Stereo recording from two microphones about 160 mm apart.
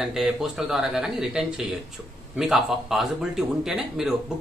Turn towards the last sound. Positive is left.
turn(degrees=-5)  # may be behind; listen again after turning